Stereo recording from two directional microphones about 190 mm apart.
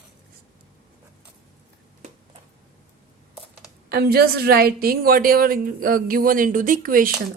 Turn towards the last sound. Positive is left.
turn(degrees=-50)  # may be behind; listen again after turning